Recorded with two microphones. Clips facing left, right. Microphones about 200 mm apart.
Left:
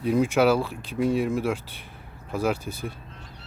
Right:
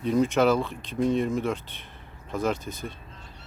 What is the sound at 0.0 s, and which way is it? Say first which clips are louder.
Speech: left 1 dB; 10° left (ahead or behind).